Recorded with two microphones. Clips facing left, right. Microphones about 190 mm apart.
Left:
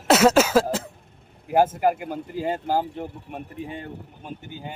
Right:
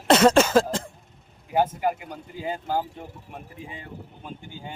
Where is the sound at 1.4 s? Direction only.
50° left (ahead or behind).